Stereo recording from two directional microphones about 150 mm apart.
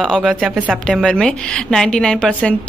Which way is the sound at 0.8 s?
5° left (ahead or behind).